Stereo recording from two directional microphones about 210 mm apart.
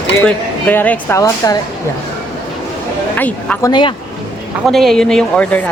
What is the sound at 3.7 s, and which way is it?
Speech, 25° left (ahead or behind).